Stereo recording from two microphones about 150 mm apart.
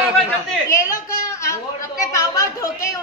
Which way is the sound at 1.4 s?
20° left (ahead or behind).